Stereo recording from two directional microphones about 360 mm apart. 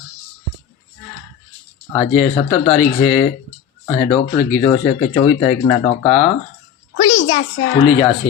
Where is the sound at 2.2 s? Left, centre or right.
Centre.